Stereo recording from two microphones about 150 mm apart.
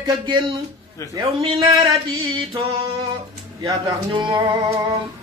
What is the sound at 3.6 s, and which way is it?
Speech, 20° right (ahead or behind).